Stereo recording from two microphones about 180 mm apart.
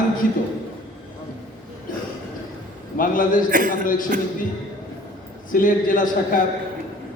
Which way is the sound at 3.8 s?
50° left (ahead or behind).